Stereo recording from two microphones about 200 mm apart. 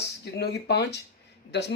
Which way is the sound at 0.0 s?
55° left (ahead or behind).